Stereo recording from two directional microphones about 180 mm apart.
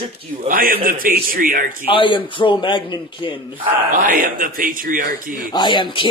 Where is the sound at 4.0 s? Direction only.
50° right (ahead or behind).